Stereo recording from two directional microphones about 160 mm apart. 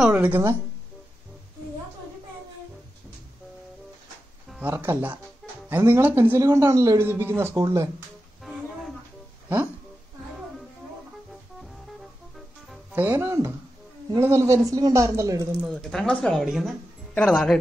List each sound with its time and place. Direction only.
0.0 s a woman's voice: 5° right (ahead or behind)
4.5 s speech: 10° right (ahead or behind)
8.4 s music: centre (ahead or behind)
12.9 s a woman's voice: 15° right (ahead or behind)
15.6 s speech: centre (ahead or behind)